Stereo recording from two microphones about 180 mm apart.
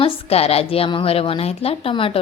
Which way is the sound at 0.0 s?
35° left (ahead or behind).